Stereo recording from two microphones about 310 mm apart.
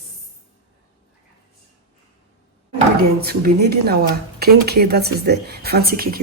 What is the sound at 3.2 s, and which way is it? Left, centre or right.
Speech, right.